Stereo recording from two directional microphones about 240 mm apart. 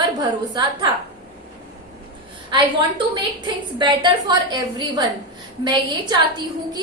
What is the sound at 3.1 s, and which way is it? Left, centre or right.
A woman's voice, centre.